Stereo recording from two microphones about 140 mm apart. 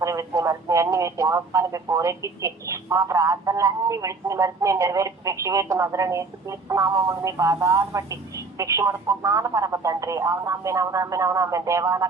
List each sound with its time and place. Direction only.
0.0 s speech: 25° right (ahead or behind)